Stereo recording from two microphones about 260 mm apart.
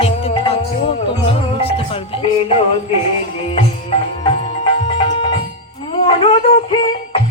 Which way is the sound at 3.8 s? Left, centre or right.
Left.